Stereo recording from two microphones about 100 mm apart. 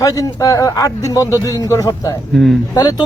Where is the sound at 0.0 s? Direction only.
35° left (ahead or behind).